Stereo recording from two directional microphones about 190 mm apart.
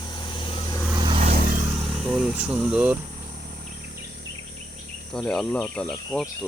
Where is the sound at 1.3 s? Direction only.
45° right (ahead or behind).